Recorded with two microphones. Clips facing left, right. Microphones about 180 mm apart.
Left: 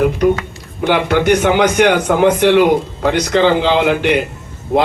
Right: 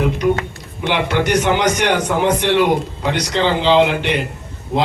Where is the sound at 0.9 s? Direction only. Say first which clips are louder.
Left 5 dB; 55° left (ahead or behind).